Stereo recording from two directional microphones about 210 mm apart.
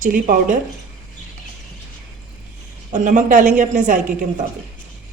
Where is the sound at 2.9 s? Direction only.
35° right (ahead or behind).